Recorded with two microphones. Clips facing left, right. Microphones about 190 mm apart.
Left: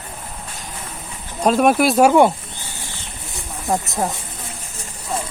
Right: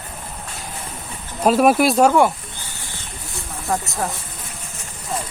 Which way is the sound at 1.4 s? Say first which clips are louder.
Even; 5° right (ahead or behind).